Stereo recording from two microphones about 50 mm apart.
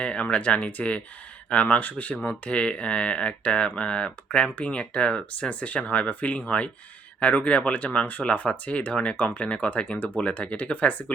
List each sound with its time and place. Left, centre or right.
0.0 s speech: left